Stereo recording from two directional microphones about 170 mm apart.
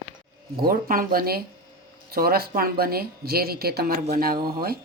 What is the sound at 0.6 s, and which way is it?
Speech, 60° right (ahead or behind).